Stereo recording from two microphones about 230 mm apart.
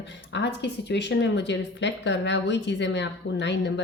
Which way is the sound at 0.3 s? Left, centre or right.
Left.